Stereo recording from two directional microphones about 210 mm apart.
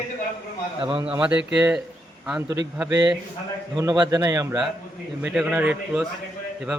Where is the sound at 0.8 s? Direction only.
20° right (ahead or behind).